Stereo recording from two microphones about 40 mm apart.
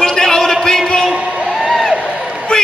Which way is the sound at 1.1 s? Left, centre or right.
Right.